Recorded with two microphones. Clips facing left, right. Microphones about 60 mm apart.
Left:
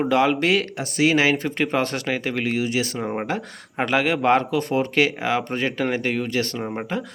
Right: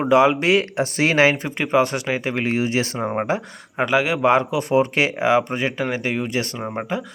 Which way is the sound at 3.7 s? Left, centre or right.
Centre.